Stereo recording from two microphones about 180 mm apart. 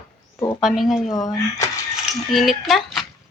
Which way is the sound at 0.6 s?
Centre (ahead or behind).